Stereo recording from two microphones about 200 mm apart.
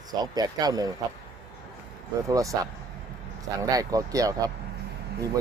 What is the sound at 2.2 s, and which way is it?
Speech, 15° right (ahead or behind).